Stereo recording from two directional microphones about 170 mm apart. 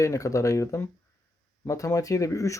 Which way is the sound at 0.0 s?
20° left (ahead or behind).